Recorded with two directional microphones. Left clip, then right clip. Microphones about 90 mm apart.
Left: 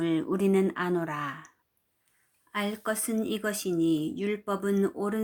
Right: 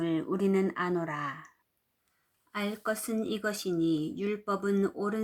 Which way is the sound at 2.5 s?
25° left (ahead or behind).